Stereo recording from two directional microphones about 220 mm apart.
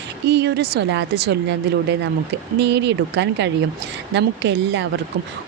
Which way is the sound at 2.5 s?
55° right (ahead or behind).